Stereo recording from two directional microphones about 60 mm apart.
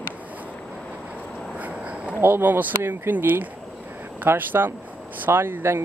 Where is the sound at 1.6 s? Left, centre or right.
Right.